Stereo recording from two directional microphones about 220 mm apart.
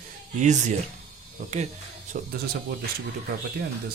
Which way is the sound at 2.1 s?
40° right (ahead or behind).